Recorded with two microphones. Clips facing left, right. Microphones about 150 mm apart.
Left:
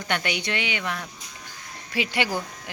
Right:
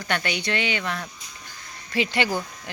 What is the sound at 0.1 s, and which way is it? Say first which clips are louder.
Speech: right 1 dB; 15° left (ahead or behind).